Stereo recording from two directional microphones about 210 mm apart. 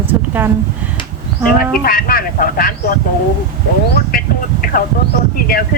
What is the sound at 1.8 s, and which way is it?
Speech, 45° left (ahead or behind).